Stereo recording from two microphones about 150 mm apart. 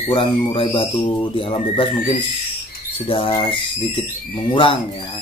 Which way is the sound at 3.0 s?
35° left (ahead or behind).